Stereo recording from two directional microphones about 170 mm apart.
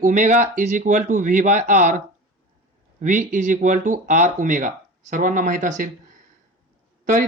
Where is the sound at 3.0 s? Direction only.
50° right (ahead or behind).